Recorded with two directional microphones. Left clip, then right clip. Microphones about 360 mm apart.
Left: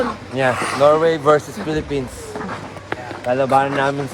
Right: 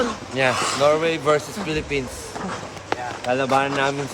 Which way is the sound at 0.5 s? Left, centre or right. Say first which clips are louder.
Left 6 dB; centre.